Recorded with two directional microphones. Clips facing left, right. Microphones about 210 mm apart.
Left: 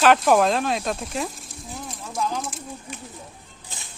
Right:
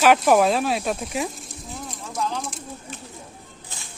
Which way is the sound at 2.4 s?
Centre (ahead or behind).